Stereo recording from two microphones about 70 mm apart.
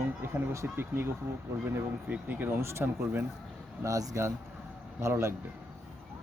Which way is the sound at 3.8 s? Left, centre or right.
Right.